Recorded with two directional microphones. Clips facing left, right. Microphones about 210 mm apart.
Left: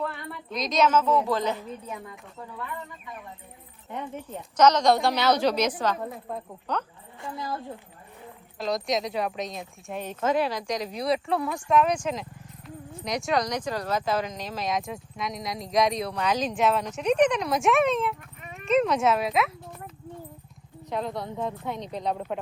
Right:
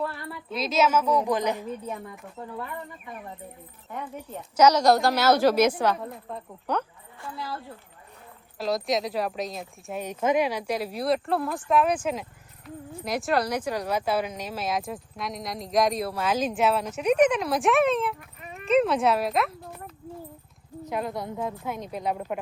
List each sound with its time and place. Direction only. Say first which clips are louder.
0.0 s a woman's voice: right 1 dB; 5° right (ahead or behind)
4.5 s a woman's voice: right 1 dB; 10° right (ahead or behind)
6.7 s a woman's voice: right 3 dB; 10° right (ahead or behind)
7.2 s speech: left 2 dB; 20° left (ahead or behind)
8.5 s speech: right 1 dB; centre (ahead or behind)
20.9 s speech: even; 5° right (ahead or behind)